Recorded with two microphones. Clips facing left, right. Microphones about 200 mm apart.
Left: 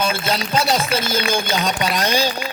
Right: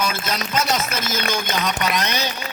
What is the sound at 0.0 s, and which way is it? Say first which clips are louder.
Speech: left 3 dB; 30° left (ahead or behind).